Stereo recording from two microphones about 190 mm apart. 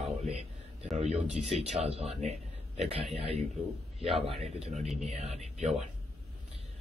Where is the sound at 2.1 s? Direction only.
35° right (ahead or behind).